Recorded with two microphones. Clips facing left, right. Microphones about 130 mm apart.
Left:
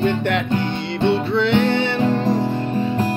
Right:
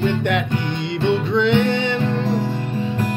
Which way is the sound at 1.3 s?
15° right (ahead or behind).